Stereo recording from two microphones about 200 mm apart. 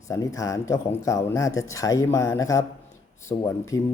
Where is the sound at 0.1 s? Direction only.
15° left (ahead or behind).